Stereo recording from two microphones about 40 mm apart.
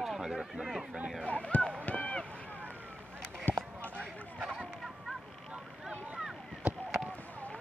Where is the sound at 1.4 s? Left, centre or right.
Left.